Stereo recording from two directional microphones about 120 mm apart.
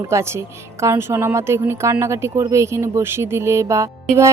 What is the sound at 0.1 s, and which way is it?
Speech, 20° right (ahead or behind).